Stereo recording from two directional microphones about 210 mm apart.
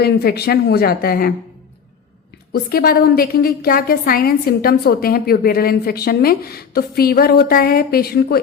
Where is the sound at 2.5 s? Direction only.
45° left (ahead or behind).